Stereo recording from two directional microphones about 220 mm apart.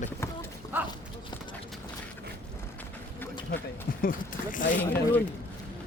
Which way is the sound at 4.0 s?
40° left (ahead or behind).